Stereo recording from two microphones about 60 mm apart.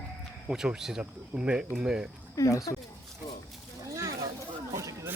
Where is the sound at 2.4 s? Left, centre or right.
Left.